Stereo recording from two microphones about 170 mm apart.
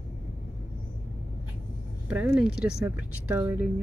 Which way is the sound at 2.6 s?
65° left (ahead or behind).